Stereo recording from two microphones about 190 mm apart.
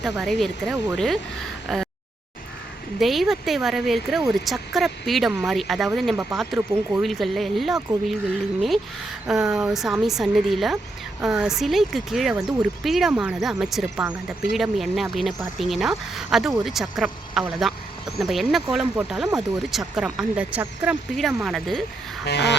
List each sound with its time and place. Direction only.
0.0 s speech: centre (ahead or behind)
3.0 s speech: centre (ahead or behind)
9.2 s speech: 5° right (ahead or behind)
22.2 s a sound: 65° left (ahead or behind)